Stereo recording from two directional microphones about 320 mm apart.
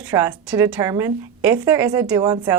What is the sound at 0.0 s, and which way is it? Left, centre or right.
A woman's voice, centre.